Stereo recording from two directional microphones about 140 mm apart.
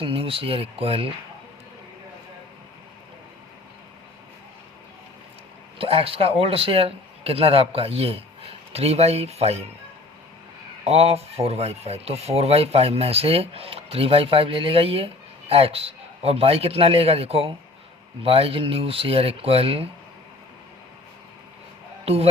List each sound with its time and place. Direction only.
0.0 s speech: 40° right (ahead or behind)
5.8 s speech: 45° right (ahead or behind)
10.8 s speech: 45° right (ahead or behind)
22.0 s speech: 45° right (ahead or behind)